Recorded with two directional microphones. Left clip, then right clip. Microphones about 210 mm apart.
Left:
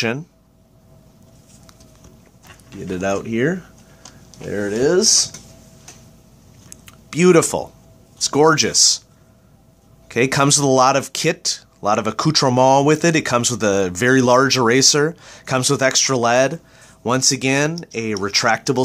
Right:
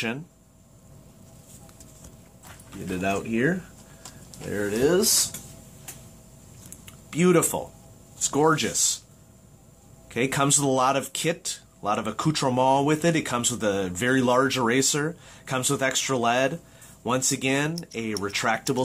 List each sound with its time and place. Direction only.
3.0 s speech: 45° left (ahead or behind)
6.7 s a sound: 40° left (ahead or behind)
8.2 s speech: 35° left (ahead or behind)
10.0 s speech: 40° left (ahead or behind)